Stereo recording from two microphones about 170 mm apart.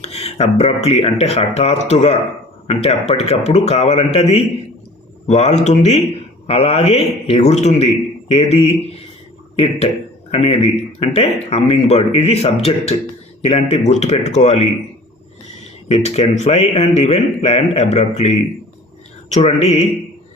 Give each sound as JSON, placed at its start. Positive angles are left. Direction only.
{"t": 0.0, "sound": "speech", "side_deg": 35}
{"t": 10.3, "sound": "speech", "side_deg": 35}
{"t": 15.9, "sound": "speech", "side_deg": 35}